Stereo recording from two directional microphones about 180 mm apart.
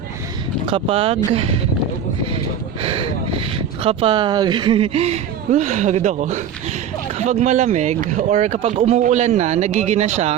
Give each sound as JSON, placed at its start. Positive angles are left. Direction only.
{"t": 0.7, "sound": "speech", "side_deg": -30}
{"t": 2.8, "sound": "a sound", "side_deg": -30}
{"t": 3.8, "sound": "speech", "side_deg": -30}